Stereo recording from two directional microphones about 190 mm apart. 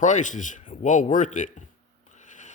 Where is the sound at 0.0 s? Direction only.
40° left (ahead or behind).